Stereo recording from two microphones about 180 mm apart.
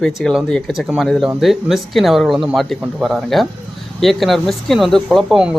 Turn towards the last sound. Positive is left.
turn(degrees=0)  # may be behind; listen again after turning